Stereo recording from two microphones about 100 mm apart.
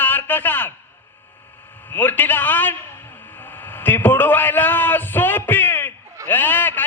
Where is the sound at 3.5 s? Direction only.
20° left (ahead or behind).